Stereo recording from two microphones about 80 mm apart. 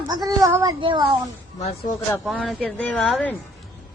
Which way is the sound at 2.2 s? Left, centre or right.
Centre.